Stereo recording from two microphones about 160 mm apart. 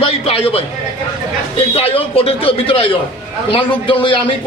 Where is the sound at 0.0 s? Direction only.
35° left (ahead or behind).